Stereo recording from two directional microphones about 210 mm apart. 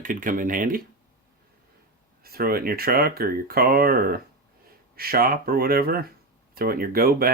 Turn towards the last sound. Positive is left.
turn(degrees=-45)  # may be behind; listen again after turning